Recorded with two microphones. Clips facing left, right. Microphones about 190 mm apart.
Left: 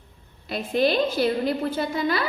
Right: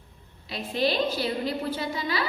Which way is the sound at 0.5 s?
50° left (ahead or behind).